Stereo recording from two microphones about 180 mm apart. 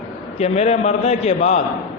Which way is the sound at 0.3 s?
35° left (ahead or behind).